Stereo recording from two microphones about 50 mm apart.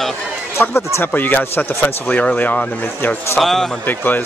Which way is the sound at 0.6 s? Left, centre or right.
Left.